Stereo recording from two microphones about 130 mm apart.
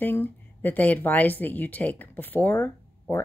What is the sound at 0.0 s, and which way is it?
Speech, 15° left (ahead or behind).